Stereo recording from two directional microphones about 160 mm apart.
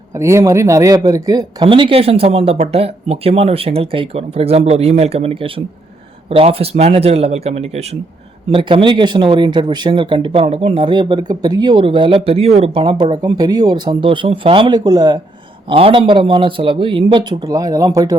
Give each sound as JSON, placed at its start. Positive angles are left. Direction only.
{"t": 0.1, "sound": "speech", "side_deg": -20}
{"t": 15.7, "sound": "speech", "side_deg": -35}